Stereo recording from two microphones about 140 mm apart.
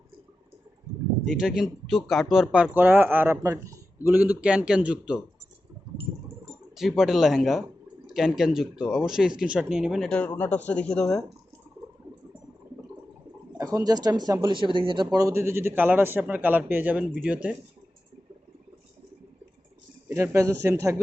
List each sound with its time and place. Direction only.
1.2 s speech: 5° right (ahead or behind)
6.7 s speech: centre (ahead or behind)
13.6 s speech: 25° right (ahead or behind); by 17.5 s 10° right (ahead or behind)
20.1 s a man's voice: 15° right (ahead or behind)